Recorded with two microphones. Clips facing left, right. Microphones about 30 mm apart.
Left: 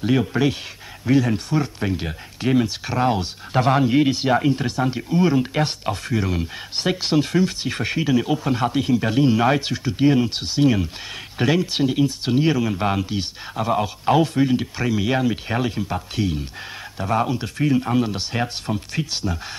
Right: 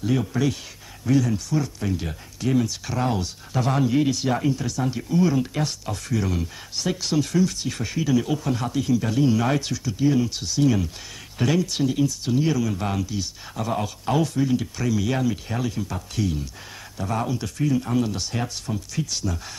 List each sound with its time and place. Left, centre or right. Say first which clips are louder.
0.0 s speech: left 4 dB; left
13.7 s speech: left 6 dB; left